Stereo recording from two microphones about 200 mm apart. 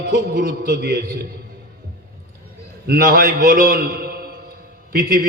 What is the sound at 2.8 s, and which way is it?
A man's voice, 50° right (ahead or behind).